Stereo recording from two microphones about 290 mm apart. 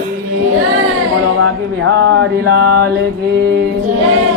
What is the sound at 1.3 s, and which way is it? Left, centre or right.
Speech, right.